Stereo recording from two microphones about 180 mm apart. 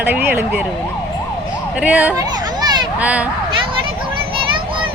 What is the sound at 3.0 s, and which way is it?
Speech, 10° right (ahead or behind).